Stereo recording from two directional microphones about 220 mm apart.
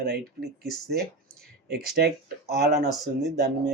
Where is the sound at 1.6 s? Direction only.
45° right (ahead or behind).